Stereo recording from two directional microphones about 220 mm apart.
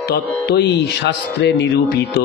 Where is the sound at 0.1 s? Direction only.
50° left (ahead or behind).